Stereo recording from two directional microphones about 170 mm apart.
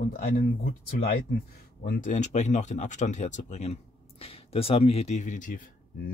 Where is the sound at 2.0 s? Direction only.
45° left (ahead or behind).